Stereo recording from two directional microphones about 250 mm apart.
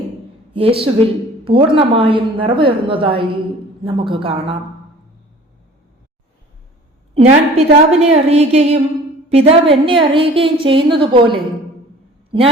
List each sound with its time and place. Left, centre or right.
0.5 s a woman's voice: right
7.1 s a woman's voice: right